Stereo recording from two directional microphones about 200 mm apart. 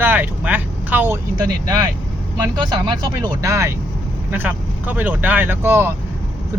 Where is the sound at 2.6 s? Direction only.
20° right (ahead or behind).